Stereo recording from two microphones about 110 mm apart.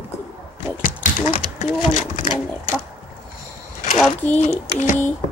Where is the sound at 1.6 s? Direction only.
90° left.